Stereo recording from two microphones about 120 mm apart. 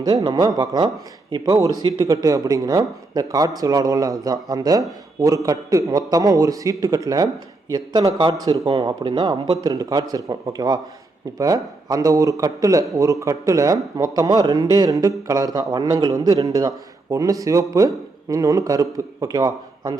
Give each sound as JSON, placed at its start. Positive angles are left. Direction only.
{"t": 0.0, "sound": "a man's voice", "side_deg": -30}